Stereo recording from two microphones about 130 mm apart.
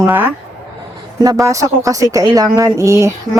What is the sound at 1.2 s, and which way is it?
Speech, 25° right (ahead or behind).